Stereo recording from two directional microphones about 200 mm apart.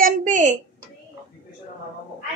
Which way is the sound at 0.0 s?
40° right (ahead or behind).